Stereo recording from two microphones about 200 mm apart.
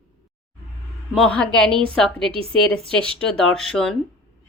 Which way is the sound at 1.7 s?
25° right (ahead or behind).